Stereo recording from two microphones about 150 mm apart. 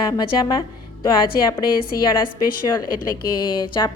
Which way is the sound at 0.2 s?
30° left (ahead or behind).